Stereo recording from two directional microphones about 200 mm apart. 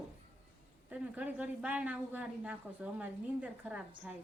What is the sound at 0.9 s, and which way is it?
A woman's voice, 5° right (ahead or behind).